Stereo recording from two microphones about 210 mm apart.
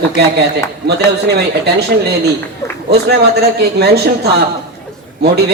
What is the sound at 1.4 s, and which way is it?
A man's voice, 50° right (ahead or behind).